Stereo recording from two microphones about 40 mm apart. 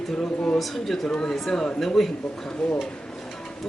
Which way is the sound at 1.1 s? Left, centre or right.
Centre.